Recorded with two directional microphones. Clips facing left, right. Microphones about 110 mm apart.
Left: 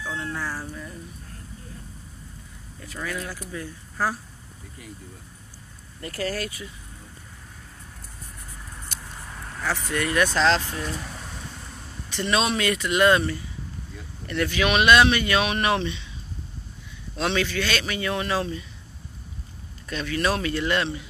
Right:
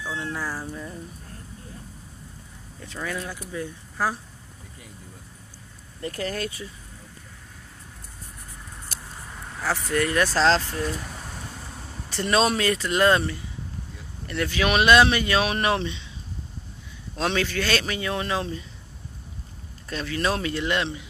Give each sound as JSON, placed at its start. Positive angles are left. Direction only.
{"t": 0.0, "sound": "cat", "side_deg": -5}
{"t": 0.4, "sound": "speech", "side_deg": -15}
{"t": 3.0, "sound": "speech", "side_deg": -20}
{"t": 5.9, "sound": "speech", "side_deg": -20}
{"t": 9.3, "sound": "vehicle", "side_deg": -5}
{"t": 10.1, "sound": "a man's voice", "side_deg": -35}
{"t": 12.1, "sound": "a man's voice", "side_deg": -40}
{"t": 14.2, "sound": "speech", "side_deg": -30}
{"t": 17.2, "sound": "a man's voice", "side_deg": -40}
{"t": 19.9, "sound": "speech", "side_deg": -30}